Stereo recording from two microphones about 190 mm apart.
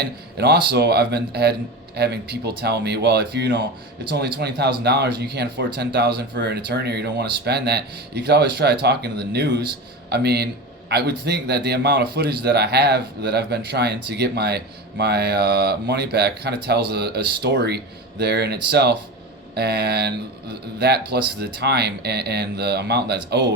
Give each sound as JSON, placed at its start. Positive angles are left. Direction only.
{"t": 0.0, "sound": "speech", "side_deg": -60}